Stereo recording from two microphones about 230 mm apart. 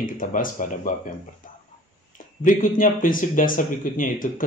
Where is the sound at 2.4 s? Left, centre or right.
Left.